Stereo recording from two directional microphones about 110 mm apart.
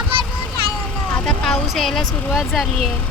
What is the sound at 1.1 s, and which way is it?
Speech, 5° left (ahead or behind).